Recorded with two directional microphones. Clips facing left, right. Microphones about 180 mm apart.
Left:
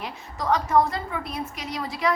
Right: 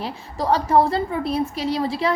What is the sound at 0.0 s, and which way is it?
A woman's voice, 30° right (ahead or behind).